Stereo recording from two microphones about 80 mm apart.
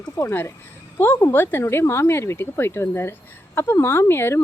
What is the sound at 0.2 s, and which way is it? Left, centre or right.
A woman's voice, left.